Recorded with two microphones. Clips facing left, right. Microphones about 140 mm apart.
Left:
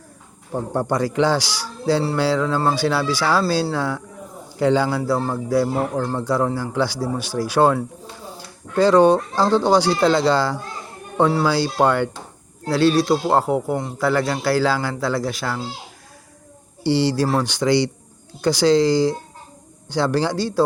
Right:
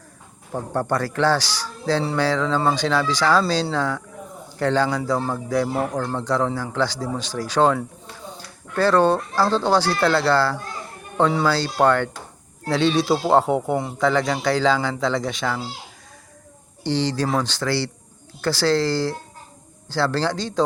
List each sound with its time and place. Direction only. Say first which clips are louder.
0.5 s speech: left 2 dB; 15° left (ahead or behind)
16.8 s speech: left 4 dB; 10° left (ahead or behind)